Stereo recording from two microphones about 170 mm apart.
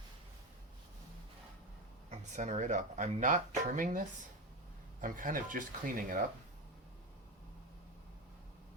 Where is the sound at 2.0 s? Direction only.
45° right (ahead or behind).